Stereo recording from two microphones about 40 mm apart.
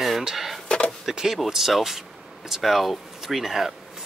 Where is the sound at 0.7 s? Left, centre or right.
Left.